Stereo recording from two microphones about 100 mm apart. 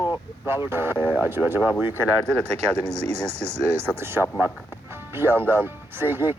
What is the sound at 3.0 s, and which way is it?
Speech, 90° right.